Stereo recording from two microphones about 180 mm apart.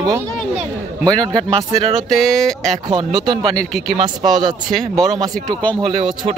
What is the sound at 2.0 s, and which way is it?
Speech, centre (ahead or behind).